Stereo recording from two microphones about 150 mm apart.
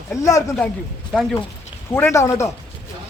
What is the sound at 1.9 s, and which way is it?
Speech, 15° left (ahead or behind).